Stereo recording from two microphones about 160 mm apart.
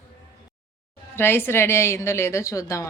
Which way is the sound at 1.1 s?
15° left (ahead or behind).